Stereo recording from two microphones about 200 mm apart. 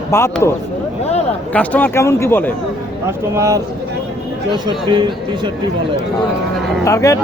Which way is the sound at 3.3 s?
15° right (ahead or behind).